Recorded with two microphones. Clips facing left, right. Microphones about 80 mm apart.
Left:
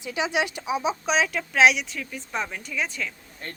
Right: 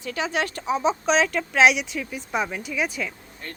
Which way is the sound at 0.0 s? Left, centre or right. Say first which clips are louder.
Even; centre.